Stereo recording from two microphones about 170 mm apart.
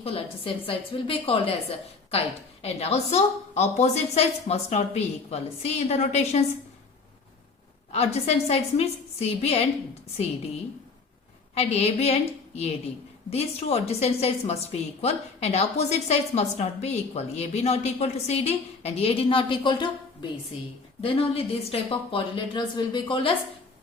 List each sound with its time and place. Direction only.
0.0 s a woman's voice: 35° left (ahead or behind)
7.9 s a woman's voice: 40° left (ahead or behind)
11.5 s a woman's voice: 35° left (ahead or behind)
13.3 s a woman's voice: 35° left (ahead or behind)
21.0 s a woman's voice: 35° left (ahead or behind)